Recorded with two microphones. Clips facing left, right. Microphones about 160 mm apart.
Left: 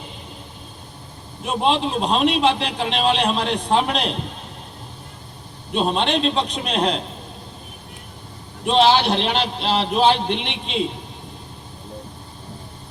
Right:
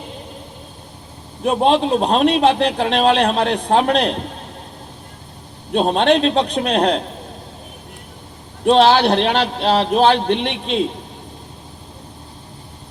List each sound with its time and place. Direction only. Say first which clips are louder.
1.5 s a man's voice: right 6 dB; 50° right (ahead or behind)
5.7 s a man's voice: right 6 dB; 50° right (ahead or behind)
8.6 s a man's voice: right 4 dB; 50° right (ahead or behind)